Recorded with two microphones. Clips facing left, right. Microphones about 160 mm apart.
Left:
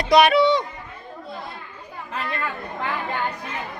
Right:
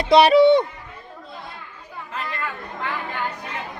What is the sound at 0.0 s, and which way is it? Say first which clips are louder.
Speech: right 2 dB; 30° right (ahead or behind).